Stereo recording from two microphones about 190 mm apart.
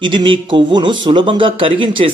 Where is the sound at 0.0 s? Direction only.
25° right (ahead or behind).